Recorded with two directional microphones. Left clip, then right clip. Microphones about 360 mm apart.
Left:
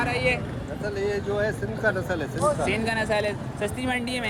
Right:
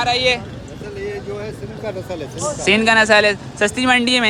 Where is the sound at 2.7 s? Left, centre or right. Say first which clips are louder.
Right 13 dB; right.